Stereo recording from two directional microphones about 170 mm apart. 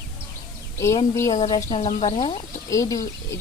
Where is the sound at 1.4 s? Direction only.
35° left (ahead or behind).